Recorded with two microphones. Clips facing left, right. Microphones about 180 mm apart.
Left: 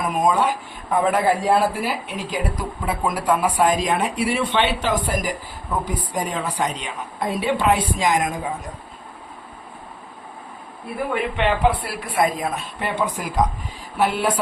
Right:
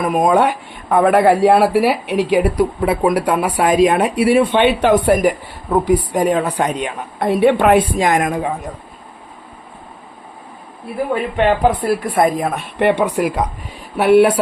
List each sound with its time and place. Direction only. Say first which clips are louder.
0.1 s speech: right 6 dB; 65° right (ahead or behind)
11.1 s speech: right 6 dB; 45° right (ahead or behind); by 14.3 s 65° right (ahead or behind)